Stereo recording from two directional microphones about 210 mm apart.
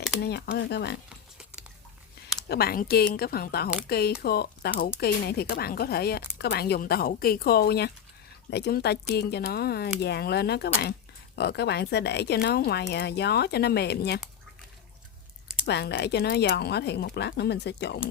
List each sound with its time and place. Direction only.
0.2 s speech: 50° left (ahead or behind)
2.5 s speech: 45° left (ahead or behind)
15.6 s speech: 50° left (ahead or behind)